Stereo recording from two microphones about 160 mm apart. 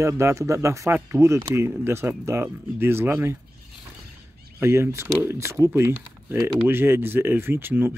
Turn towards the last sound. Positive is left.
turn(degrees=-15)  # may be behind; listen again after turning